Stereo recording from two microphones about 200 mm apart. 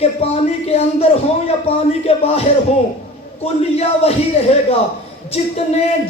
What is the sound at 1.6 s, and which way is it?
Speech, 30° left (ahead or behind).